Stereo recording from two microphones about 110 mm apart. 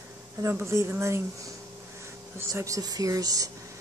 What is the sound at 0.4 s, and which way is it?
A woman's voice, 25° right (ahead or behind).